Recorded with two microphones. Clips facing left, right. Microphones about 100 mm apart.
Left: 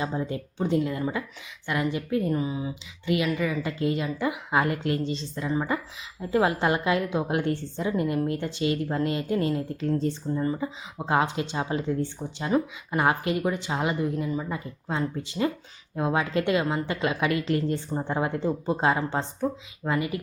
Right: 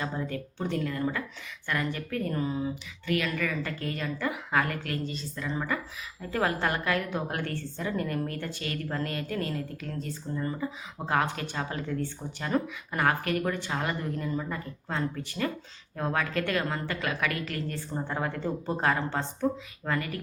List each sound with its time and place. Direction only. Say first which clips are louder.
0.0 s a woman's voice: left 4 dB; 20° left (ahead or behind)
10.4 s a woman's voice: left 4 dB; 15° left (ahead or behind)